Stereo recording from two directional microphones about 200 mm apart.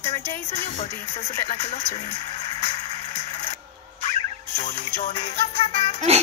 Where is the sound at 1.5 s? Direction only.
35° left (ahead or behind).